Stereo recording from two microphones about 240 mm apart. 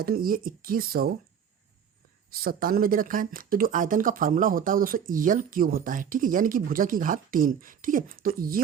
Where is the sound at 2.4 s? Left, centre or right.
Right.